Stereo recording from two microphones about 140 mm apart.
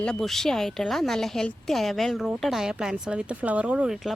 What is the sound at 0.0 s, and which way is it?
A woman's voice, 5° left (ahead or behind).